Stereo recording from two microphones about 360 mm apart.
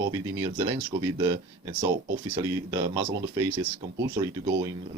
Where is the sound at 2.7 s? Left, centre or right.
Centre.